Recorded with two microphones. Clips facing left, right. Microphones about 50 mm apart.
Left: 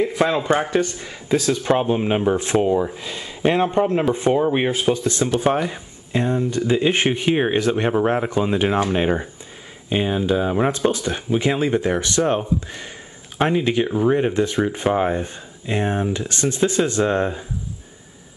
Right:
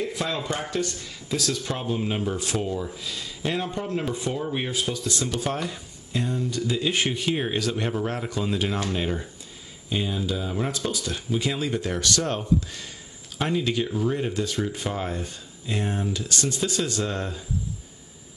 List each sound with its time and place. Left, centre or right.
0.0 s speech: left